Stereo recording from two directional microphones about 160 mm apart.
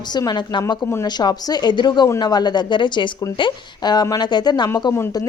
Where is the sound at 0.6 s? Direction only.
15° left (ahead or behind).